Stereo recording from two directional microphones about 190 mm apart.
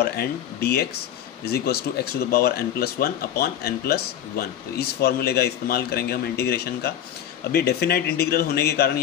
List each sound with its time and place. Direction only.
0.0 s speech: 55° left (ahead or behind)